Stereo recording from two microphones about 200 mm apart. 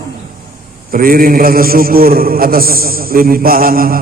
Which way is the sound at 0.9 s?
45° right (ahead or behind).